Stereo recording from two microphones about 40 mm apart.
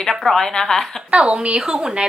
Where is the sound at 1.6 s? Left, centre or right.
Centre.